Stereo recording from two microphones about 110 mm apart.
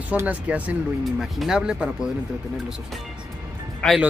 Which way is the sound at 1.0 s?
Centre (ahead or behind).